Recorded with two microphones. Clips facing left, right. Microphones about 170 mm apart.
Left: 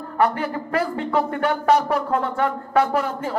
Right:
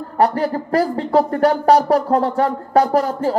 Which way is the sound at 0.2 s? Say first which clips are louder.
Right 4 dB; 40° right (ahead or behind).